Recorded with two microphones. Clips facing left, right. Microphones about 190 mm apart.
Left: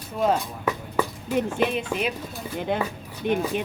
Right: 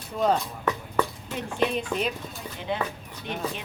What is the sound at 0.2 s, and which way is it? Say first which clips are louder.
Speech: left 1 dB; 5° left (ahead or behind).